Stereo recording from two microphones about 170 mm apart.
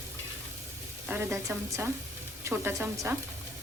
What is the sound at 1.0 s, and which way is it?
A woman's voice, 15° right (ahead or behind).